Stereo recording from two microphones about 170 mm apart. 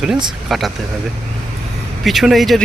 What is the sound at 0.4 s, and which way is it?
Speech, centre (ahead or behind).